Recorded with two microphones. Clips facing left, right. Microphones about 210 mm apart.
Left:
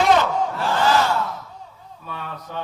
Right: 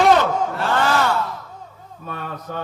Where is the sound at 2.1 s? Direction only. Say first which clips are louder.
Right 3 dB; 45° right (ahead or behind).